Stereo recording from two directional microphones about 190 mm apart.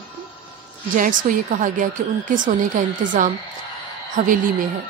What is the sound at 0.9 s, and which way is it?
Speech, 45° right (ahead or behind).